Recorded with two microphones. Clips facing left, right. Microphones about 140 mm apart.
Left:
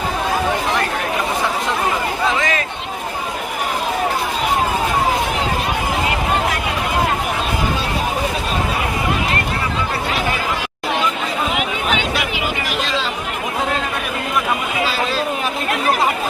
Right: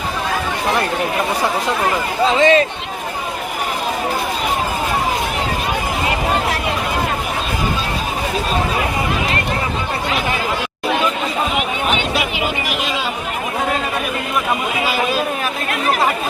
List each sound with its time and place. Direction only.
2.2 s speech: 25° right (ahead or behind)